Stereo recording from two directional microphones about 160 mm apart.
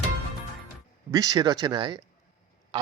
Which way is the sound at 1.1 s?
20° right (ahead or behind).